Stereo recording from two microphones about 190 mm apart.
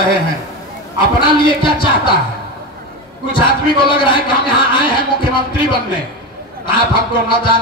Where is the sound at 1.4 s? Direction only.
25° left (ahead or behind).